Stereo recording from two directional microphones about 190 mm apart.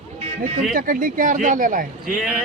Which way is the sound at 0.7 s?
45° right (ahead or behind).